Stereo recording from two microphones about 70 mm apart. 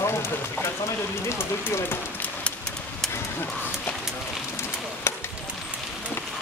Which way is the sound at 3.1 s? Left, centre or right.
Left.